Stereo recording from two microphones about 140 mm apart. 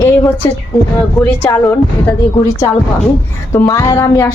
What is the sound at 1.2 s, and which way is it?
Speech, 20° left (ahead or behind).